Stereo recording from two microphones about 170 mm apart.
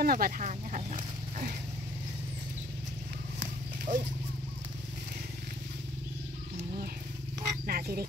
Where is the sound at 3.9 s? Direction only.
50° right (ahead or behind).